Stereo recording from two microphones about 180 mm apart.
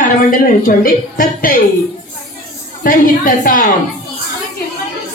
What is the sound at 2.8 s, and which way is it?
Speech, 50° left (ahead or behind).